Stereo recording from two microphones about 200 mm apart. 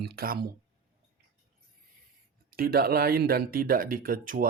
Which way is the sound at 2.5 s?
50° right (ahead or behind).